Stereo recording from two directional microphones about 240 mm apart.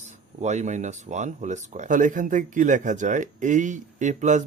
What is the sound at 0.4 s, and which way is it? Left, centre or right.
Speech, right.